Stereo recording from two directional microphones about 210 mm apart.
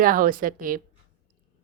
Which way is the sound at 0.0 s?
40° right (ahead or behind).